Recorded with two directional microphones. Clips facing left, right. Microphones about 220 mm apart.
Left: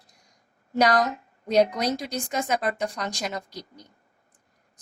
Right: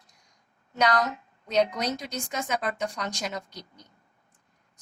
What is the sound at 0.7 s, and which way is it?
Speech, 35° left (ahead or behind).